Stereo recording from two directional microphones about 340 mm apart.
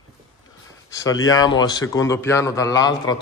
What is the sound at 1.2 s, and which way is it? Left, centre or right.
A man's voice, centre.